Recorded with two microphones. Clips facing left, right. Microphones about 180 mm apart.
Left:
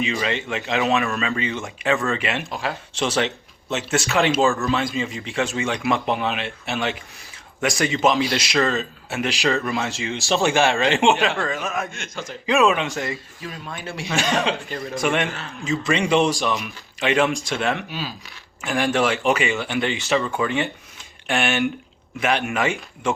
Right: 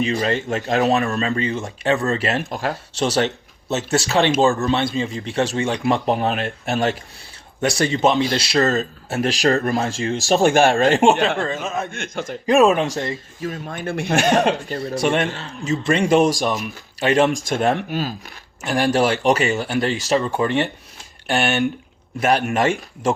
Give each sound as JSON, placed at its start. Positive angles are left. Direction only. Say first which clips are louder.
{"t": 0.0, "sound": "speech", "louder": "right 4 dB", "side_deg": -40}
{"t": 10.3, "sound": "speech", "louder": "right 4 dB", "side_deg": -55}
{"t": 10.7, "sound": "speech", "louder": "right 4 dB", "side_deg": -45}
{"t": 11.9, "sound": "speech", "louder": "right 5 dB", "side_deg": -55}
{"t": 14.7, "sound": "speech", "louder": "right 3 dB", "side_deg": -35}
{"t": 15.9, "sound": "speech", "louder": "right 3 dB", "side_deg": -45}
{"t": 18.6, "sound": "speech", "louder": "right 3 dB", "side_deg": -35}
{"t": 21.3, "sound": "speech", "louder": "right 2 dB", "side_deg": 0}
{"t": 22.2, "sound": "speech", "louder": "right 4 dB", "side_deg": -40}